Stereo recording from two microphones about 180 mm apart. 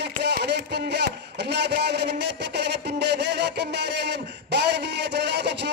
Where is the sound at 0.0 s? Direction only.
70° right (ahead or behind).